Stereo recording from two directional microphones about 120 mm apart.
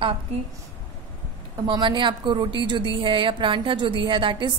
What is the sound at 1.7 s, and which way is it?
A woman's voice, 40° right (ahead or behind).